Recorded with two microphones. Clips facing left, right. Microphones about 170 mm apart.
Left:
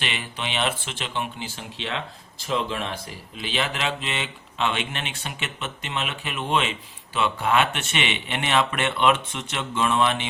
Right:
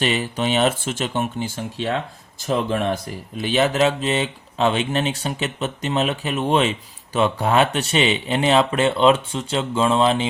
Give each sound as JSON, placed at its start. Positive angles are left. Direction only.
{"t": 0.0, "sound": "speech", "side_deg": -40}